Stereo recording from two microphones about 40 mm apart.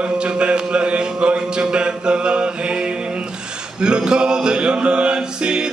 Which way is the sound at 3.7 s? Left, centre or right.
Right.